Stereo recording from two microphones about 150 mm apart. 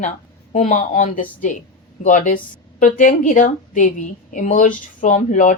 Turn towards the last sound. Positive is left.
turn(degrees=55)  # may be behind; listen again after turning